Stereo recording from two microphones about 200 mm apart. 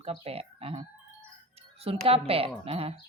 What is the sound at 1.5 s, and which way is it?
Music, 30° right (ahead or behind).